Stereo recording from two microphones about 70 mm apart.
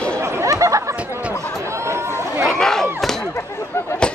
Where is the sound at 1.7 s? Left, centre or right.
Right.